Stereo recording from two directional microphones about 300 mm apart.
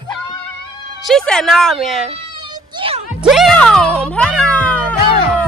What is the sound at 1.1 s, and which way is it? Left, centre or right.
A woman's voice, centre.